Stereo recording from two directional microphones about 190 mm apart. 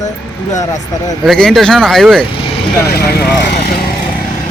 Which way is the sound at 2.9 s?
55° left (ahead or behind).